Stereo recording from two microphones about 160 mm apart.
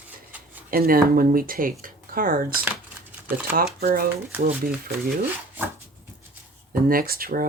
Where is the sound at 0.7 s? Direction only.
65° right (ahead or behind).